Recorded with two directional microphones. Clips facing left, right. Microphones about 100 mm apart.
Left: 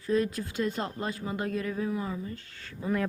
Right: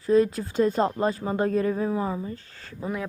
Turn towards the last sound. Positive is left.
turn(degrees=-10)  # may be behind; listen again after turning